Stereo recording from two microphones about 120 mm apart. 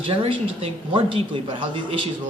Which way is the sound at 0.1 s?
50° right (ahead or behind).